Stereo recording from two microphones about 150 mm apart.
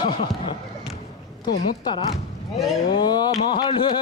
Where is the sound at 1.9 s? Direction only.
25° left (ahead or behind).